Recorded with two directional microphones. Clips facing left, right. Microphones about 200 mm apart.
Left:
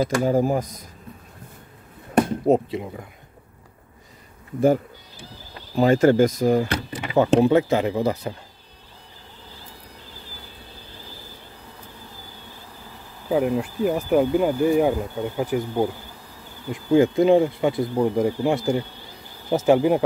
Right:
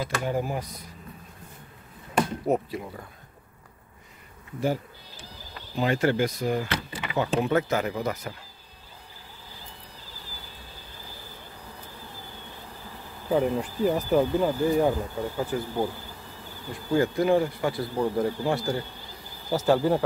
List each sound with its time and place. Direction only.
0.0 s speech: 40° left (ahead or behind)
2.4 s speech: 25° left (ahead or behind)
5.8 s speech: 45° left (ahead or behind)
7.3 s speech: 30° left (ahead or behind)
13.3 s speech: 5° left (ahead or behind)